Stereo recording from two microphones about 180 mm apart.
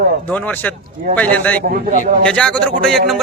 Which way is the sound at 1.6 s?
55° right (ahead or behind).